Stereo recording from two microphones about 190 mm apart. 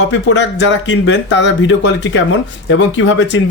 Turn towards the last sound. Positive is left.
turn(degrees=70)  # may be behind; listen again after turning